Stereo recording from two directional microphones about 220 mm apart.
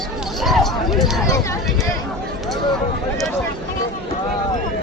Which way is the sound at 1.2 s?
15° left (ahead or behind).